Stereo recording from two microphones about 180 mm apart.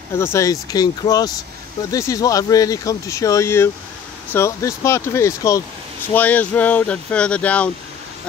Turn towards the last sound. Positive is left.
turn(degrees=5)  # may be behind; listen again after turning